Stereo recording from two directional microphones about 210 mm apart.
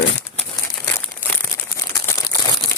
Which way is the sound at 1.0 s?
5° left (ahead or behind).